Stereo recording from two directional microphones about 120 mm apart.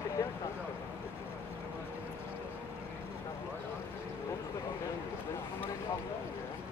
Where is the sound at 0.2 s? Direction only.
25° left (ahead or behind).